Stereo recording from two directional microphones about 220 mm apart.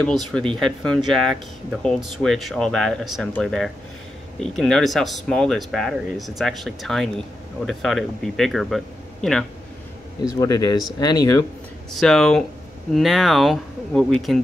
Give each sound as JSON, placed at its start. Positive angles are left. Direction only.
{"t": 0.0, "sound": "speech", "side_deg": 5}
{"t": 10.4, "sound": "speech", "side_deg": 15}
{"t": 11.9, "sound": "speech", "side_deg": 0}